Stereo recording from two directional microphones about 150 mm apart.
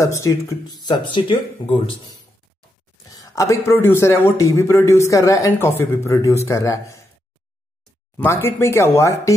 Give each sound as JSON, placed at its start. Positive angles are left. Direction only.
{"t": 0.0, "sound": "a man's voice", "side_deg": 20}
{"t": 3.1, "sound": "a man's voice", "side_deg": 20}
{"t": 8.2, "sound": "speech", "side_deg": 15}